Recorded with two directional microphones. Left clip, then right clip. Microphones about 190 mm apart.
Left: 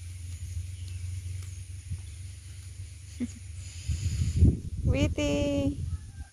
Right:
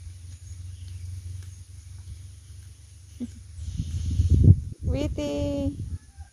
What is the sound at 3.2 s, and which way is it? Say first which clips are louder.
Speech: left 1 dB; centre (ahead or behind).